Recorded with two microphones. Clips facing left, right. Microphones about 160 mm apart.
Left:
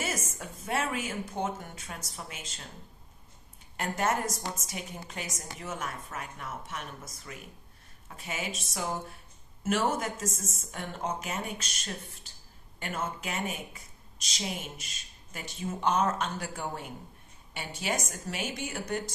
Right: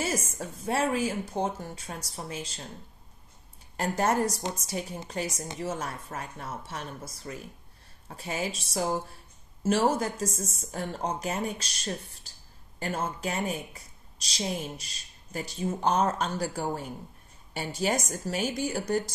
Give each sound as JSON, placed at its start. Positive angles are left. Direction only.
{"t": 0.0, "sound": "a woman's voice", "side_deg": -30}
{"t": 3.7, "sound": "a woman's voice", "side_deg": -35}